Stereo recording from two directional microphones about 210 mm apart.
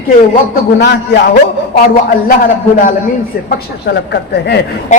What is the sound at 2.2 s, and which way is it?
A man's voice, 45° left (ahead or behind).